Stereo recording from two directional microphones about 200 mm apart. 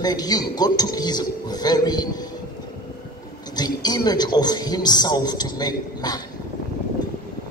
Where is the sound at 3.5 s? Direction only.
20° left (ahead or behind).